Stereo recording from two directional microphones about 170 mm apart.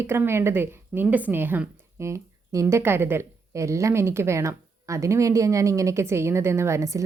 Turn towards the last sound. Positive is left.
turn(degrees=-20)  # may be behind; listen again after turning